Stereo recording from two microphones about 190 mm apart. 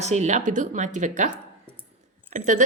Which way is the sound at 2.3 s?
40° right (ahead or behind).